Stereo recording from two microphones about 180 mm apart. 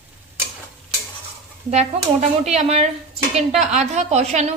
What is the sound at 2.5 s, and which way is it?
A woman's voice, 35° right (ahead or behind).